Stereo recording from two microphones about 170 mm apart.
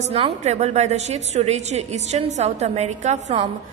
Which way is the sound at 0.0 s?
35° right (ahead or behind).